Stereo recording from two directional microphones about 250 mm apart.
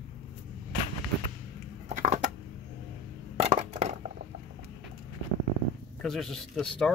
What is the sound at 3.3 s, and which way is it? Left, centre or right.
Crushing, right.